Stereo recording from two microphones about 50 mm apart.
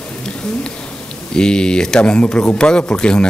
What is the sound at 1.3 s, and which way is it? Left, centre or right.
Speech, centre.